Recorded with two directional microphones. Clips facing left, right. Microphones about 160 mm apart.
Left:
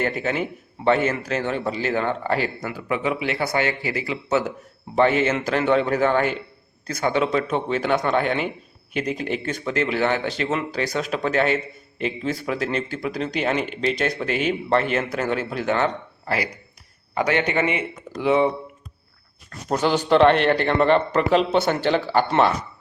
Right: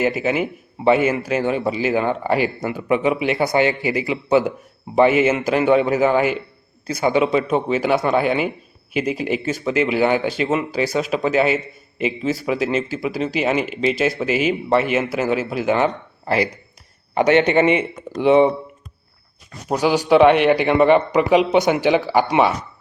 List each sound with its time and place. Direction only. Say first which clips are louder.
0.0 s a man's voice: right 4 dB; 5° right (ahead or behind)
16.2 s speech: right 6 dB; 25° right (ahead or behind)
19.5 s a man's voice: right 3 dB; 10° right (ahead or behind)